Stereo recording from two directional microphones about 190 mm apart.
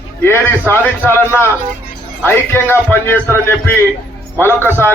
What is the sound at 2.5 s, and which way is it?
A man's voice, 10° left (ahead or behind).